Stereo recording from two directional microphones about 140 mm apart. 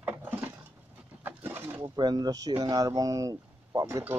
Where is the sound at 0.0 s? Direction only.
15° right (ahead or behind).